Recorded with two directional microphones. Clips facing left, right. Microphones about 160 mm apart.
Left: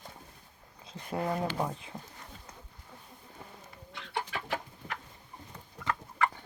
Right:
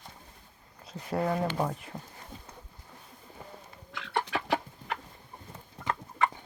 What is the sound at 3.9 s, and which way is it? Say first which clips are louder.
Bird: right 5 dB; 90° right.